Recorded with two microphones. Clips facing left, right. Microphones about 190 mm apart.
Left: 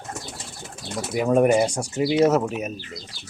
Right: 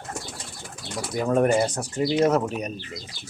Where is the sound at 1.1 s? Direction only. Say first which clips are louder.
Left 3 dB; 10° left (ahead or behind).